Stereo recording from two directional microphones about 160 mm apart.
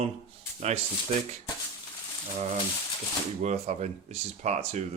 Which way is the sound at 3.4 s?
45° right (ahead or behind).